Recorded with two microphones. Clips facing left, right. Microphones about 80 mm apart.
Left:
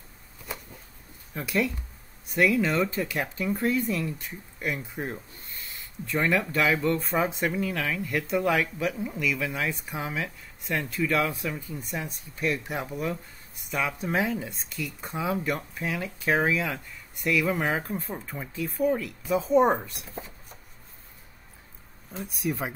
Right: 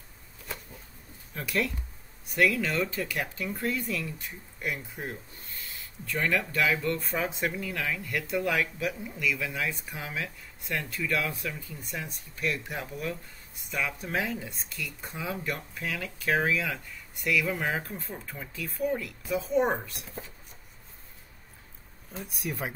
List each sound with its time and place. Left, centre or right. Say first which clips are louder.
0.5 s a sound: left 2 dB; centre
1.3 s speech: left 3 dB; centre
2.3 s speech: left 3 dB; left
5.0 s speech: left 4 dB; left
6.1 s speech: left 3 dB; left
7.4 s speech: left 3 dB; centre
8.1 s speech: left 5 dB; left
9.2 s speech: left 1 dB; centre
9.5 s speech: left 3 dB; centre
22.1 s speech: left 5 dB; centre